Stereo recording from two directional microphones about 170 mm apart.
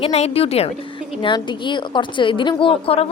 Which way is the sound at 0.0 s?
35° left (ahead or behind).